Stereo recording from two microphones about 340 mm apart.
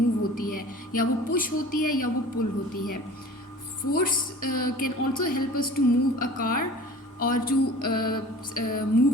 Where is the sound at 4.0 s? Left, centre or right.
Left.